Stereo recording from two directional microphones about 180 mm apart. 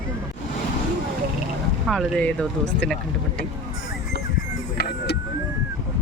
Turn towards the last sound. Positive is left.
turn(degrees=65)  # may be behind; listen again after turning